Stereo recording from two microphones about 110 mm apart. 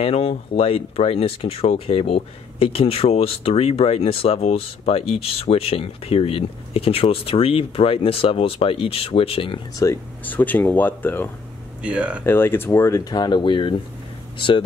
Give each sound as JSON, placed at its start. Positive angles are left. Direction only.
{"t": 0.0, "sound": "speech", "side_deg": 65}
{"t": 9.8, "sound": "speech", "side_deg": 30}
{"t": 10.2, "sound": "speech", "side_deg": 15}
{"t": 11.8, "sound": "speech", "side_deg": -10}
{"t": 12.3, "sound": "speech", "side_deg": 20}